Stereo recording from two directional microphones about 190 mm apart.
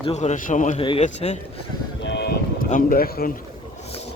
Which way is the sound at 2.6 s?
45° left (ahead or behind).